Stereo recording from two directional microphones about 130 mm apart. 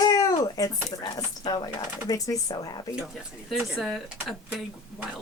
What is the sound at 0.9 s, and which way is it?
Speech, 30° left (ahead or behind).